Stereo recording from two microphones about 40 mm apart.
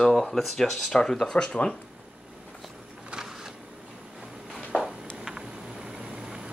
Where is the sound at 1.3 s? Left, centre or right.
Left.